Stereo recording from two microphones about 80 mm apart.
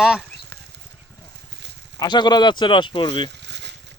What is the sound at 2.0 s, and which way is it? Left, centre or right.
Speech, left.